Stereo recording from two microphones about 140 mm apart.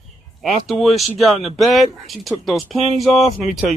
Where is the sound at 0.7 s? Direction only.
Centre (ahead or behind).